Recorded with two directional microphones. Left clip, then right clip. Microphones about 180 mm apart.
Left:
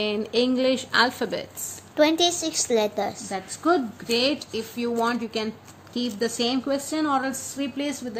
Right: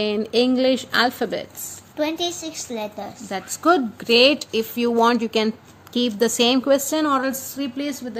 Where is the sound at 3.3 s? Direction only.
40° right (ahead or behind).